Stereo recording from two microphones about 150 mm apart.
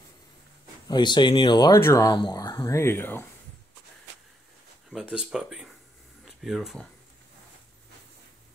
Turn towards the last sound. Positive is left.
turn(degrees=0)  # may be behind; listen again after turning